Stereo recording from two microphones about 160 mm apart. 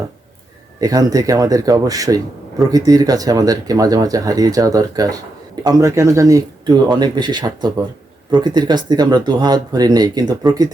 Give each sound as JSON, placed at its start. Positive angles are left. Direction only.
{"t": 0.8, "sound": "speech", "side_deg": -20}